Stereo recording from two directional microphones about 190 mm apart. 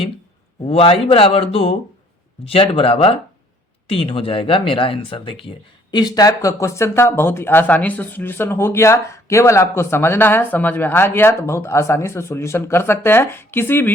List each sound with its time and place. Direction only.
0.7 s speech: 30° left (ahead or behind); by 13.9 s 10° left (ahead or behind)